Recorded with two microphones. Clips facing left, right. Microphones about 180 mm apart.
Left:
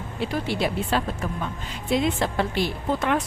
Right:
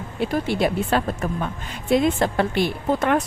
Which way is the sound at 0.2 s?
50° right (ahead or behind).